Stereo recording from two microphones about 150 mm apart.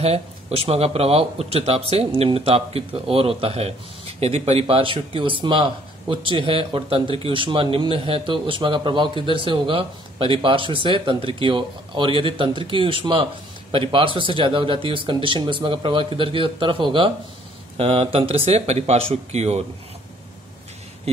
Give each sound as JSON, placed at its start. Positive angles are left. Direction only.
{"t": 0.0, "sound": "speech", "side_deg": -40}